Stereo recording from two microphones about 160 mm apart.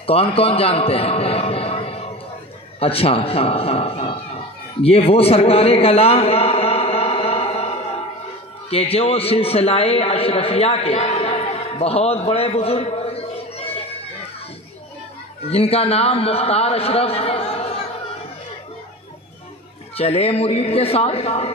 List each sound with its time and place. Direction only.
0.0 s a man's voice: 35° left (ahead or behind)
4.8 s a sound: 40° left (ahead or behind)
8.6 s a man's voice: 40° left (ahead or behind)
15.4 s a man's voice: 40° left (ahead or behind)
20.0 s a man's voice: 40° left (ahead or behind)